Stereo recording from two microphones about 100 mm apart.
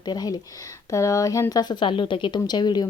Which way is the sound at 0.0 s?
45° left (ahead or behind).